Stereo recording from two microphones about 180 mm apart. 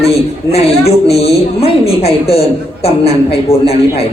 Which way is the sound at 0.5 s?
35° left (ahead or behind).